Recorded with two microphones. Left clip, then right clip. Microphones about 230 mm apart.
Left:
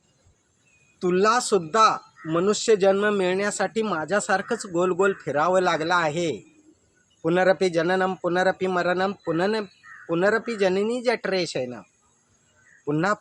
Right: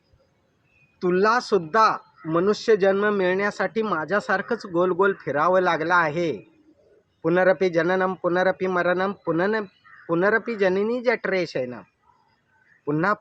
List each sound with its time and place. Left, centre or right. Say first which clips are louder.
0.9 s speech: even; centre